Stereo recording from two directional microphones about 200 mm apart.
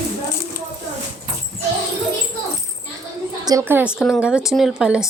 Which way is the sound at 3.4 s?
15° right (ahead or behind).